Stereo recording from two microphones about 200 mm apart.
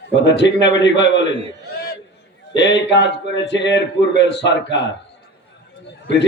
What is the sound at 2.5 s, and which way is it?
A man's voice, 60° left (ahead or behind).